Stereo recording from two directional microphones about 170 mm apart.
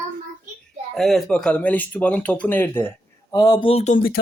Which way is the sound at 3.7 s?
40° left (ahead or behind).